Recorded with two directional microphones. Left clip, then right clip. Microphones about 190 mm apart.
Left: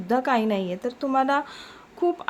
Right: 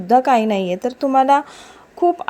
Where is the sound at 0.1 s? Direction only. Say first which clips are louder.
Right 9 dB; 25° right (ahead or behind).